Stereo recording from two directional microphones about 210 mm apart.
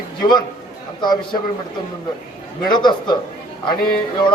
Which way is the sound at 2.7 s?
20° left (ahead or behind).